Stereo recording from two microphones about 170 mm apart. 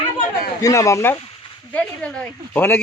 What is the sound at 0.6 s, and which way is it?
Speech, 20° left (ahead or behind).